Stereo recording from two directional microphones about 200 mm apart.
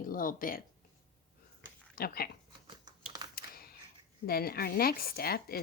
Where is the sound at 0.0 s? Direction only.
45° left (ahead or behind).